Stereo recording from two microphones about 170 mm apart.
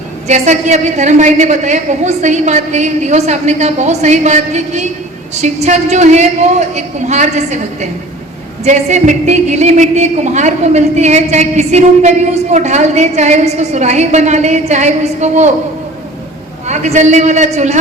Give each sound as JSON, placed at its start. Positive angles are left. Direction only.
{"t": 0.3, "sound": "a woman's voice", "side_deg": -45}
{"t": 16.6, "sound": "a woman's voice", "side_deg": -40}